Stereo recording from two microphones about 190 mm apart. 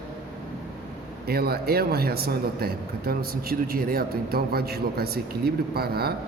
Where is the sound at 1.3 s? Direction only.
55° right (ahead or behind).